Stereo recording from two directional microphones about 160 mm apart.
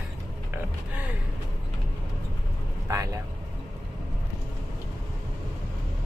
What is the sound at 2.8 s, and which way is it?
Speech, 20° right (ahead or behind).